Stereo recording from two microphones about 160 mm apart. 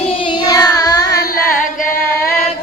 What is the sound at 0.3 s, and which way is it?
Carnatic music, 25° left (ahead or behind).